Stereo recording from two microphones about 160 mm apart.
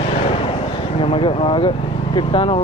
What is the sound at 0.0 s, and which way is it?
Vehicle, 35° left (ahead or behind).